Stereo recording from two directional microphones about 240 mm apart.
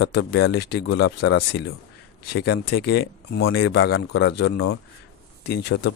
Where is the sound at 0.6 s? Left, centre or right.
Left.